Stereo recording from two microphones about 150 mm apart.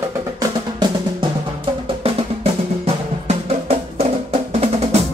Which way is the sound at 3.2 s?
45° right (ahead or behind).